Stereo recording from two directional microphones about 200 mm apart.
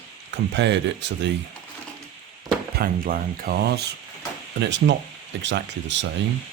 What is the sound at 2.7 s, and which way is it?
Speech, 45° right (ahead or behind).